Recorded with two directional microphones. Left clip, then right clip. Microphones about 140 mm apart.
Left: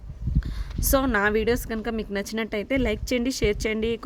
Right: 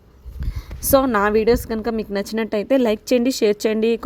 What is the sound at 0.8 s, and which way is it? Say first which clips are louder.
Speech: right 6 dB; 20° right (ahead or behind).